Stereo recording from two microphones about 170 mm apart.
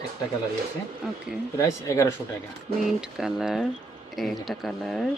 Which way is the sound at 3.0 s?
5° right (ahead or behind).